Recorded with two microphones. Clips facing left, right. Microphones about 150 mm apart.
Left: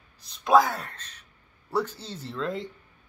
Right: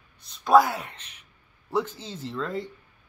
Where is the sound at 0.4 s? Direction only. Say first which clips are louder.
Right 2 dB; centre (ahead or behind).